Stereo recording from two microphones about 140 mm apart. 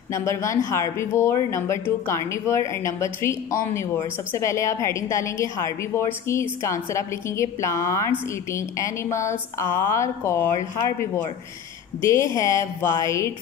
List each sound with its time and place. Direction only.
0.1 s speech: 20° left (ahead or behind)
12.0 s speech: 20° left (ahead or behind)